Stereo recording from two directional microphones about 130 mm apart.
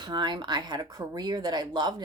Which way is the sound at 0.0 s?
35° right (ahead or behind).